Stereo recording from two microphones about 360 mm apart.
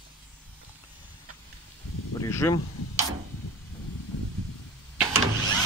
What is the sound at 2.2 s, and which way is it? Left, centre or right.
Snake, centre.